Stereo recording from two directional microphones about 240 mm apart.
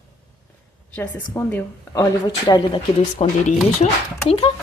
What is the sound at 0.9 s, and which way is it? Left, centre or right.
A woman's voice, centre.